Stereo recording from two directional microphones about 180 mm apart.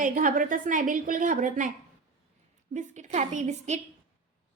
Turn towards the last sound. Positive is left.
turn(degrees=-40)  # may be behind; listen again after turning